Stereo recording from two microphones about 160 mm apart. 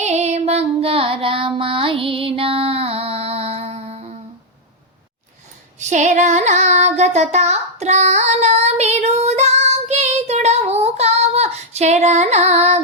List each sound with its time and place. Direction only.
0.0 s child singing: 45° right (ahead or behind)
5.8 s child singing: 50° right (ahead or behind)